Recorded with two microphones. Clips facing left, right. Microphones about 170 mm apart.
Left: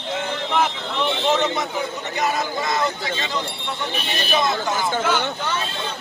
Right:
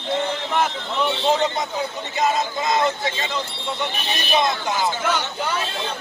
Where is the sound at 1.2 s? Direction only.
20° right (ahead or behind).